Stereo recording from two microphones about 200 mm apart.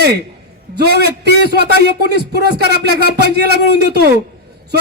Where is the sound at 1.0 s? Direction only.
55° right (ahead or behind).